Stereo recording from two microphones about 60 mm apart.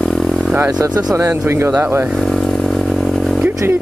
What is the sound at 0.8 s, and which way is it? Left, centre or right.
Speech, right.